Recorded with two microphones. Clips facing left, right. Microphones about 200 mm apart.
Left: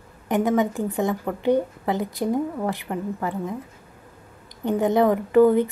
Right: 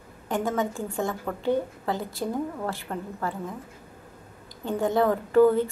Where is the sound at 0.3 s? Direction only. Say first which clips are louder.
Left 6 dB; 20° left (ahead or behind).